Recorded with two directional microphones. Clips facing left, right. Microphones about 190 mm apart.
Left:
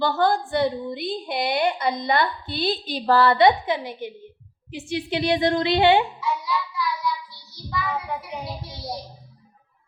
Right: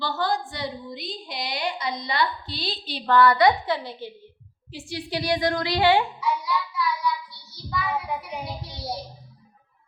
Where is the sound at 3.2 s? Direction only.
25° left (ahead or behind).